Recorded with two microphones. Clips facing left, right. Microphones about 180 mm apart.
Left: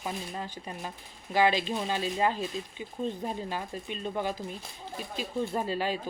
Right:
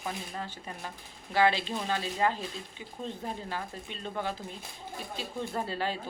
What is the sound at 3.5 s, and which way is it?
Speech, 15° left (ahead or behind).